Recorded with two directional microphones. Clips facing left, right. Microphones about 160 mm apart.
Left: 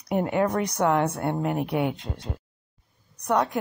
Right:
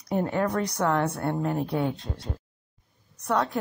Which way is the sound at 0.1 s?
15° left (ahead or behind).